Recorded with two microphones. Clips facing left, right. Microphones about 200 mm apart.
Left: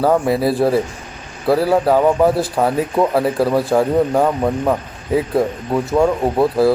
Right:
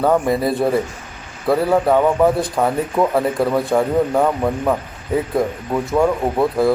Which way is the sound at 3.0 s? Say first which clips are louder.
Left 1 dB; 25° left (ahead or behind).